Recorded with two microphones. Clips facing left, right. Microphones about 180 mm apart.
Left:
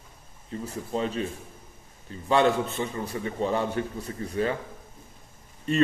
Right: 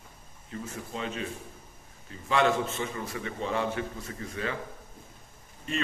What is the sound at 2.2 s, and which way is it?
A man's voice, 35° left (ahead or behind).